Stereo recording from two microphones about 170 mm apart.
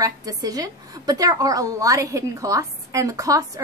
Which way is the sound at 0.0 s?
20° right (ahead or behind).